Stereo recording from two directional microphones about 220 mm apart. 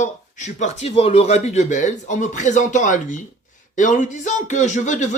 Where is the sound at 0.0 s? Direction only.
35° left (ahead or behind).